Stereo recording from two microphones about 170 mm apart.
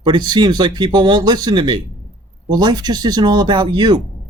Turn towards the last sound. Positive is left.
turn(degrees=-25)  # may be behind; listen again after turning